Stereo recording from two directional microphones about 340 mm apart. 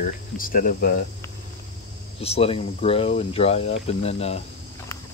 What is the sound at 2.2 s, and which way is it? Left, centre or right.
Speech, centre.